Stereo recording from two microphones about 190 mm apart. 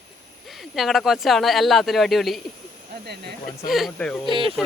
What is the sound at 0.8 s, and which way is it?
Speech, centre (ahead or behind).